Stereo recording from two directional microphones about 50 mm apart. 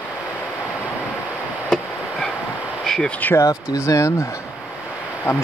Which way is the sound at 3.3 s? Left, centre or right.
Left.